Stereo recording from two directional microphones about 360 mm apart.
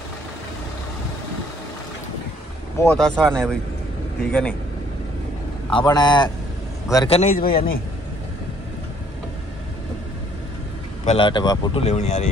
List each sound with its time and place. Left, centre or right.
2.8 s speech: centre
5.7 s a man's voice: centre
11.1 s speech: centre